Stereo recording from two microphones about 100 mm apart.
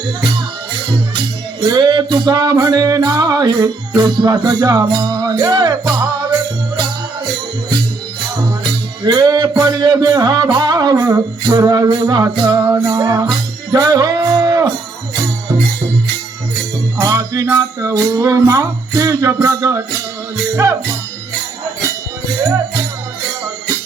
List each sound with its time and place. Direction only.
1.6 s music: 50° right (ahead or behind)
9.0 s music: 40° right (ahead or behind)
17.0 s music: 35° right (ahead or behind)
22.5 s music: 35° right (ahead or behind)